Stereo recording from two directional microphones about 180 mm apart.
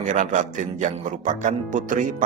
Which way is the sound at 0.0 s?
45° right (ahead or behind).